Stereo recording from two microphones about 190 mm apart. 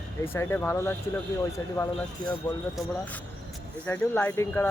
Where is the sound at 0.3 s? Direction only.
10° left (ahead or behind).